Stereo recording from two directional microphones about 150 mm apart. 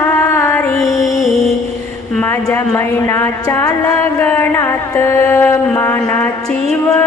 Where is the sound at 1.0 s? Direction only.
Centre (ahead or behind).